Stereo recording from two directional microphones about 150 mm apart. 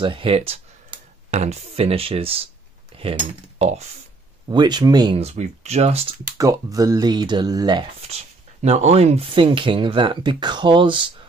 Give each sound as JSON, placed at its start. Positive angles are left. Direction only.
{"t": 0.0, "sound": "speech", "side_deg": -35}
{"t": 4.5, "sound": "speech", "side_deg": -30}
{"t": 5.1, "sound": "speech", "side_deg": -45}
{"t": 6.3, "sound": "speech", "side_deg": -25}
{"t": 8.6, "sound": "speech", "side_deg": -45}